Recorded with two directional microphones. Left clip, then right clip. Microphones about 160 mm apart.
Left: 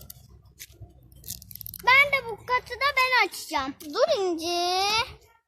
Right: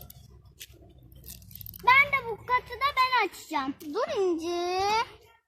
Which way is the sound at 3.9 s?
30° left (ahead or behind).